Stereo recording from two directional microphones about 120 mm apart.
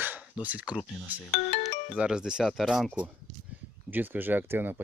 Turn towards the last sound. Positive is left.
turn(degrees=-20)  # may be behind; listen again after turning